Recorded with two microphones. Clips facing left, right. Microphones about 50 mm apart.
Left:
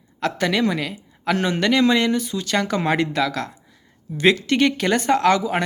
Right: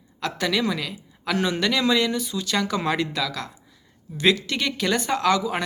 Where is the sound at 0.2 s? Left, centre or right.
Left.